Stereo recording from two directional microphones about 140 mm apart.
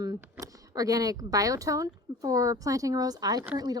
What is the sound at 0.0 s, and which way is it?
Speech, 25° right (ahead or behind).